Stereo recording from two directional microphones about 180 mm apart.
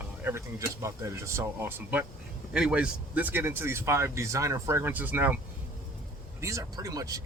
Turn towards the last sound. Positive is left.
turn(degrees=-20)  # may be behind; listen again after turning